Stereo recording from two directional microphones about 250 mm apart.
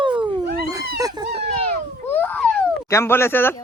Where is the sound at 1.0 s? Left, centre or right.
Centre.